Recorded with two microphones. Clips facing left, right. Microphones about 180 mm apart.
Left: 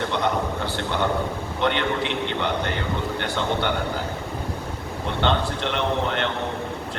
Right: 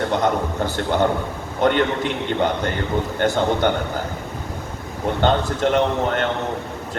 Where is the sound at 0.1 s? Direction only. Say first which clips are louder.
Right 4 dB; 45° right (ahead or behind).